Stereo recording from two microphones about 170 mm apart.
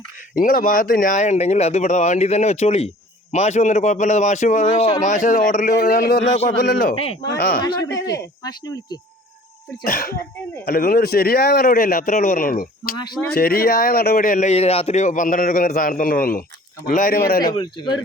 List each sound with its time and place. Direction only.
0.2 s speech: 55° left (ahead or behind)
5.7 s a man's voice: 65° left (ahead or behind)
6.2 s a man's voice: 40° left (ahead or behind)
6.6 s a man's voice: 75° left (ahead or behind)
6.9 s a man's voice: 35° left (ahead or behind)
7.2 s speech: 65° left (ahead or behind)
7.6 s speech: 20° left (ahead or behind)
9.8 s speech: 60° left (ahead or behind)
17.4 s speech: 25° left (ahead or behind)